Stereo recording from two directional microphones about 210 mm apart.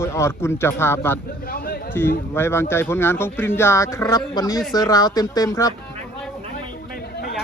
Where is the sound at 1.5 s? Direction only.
45° left (ahead or behind).